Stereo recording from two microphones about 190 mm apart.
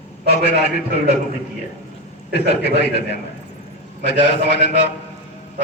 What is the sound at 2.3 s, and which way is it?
A man's voice, 60° left (ahead or behind).